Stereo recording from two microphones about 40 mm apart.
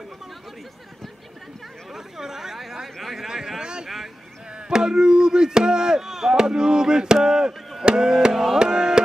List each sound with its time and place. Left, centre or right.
1.9 s chatter: centre
3.0 s a sound: centre
4.6 s chop: centre